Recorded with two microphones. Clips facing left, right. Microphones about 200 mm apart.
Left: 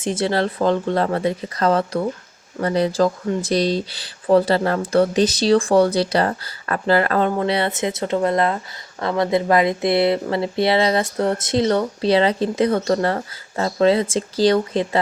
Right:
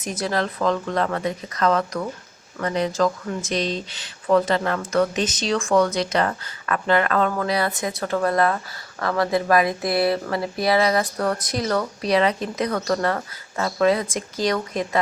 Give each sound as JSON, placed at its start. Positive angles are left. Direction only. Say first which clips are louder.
{"t": 0.0, "sound": "speech", "louder": "left 5 dB", "side_deg": 30}